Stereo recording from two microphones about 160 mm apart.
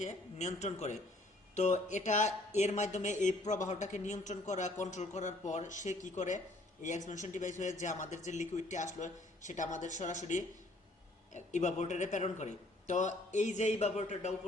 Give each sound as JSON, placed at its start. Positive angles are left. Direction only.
{"t": 0.0, "sound": "speech", "side_deg": 45}